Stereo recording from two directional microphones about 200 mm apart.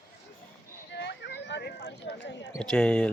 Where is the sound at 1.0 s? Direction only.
60° left (ahead or behind).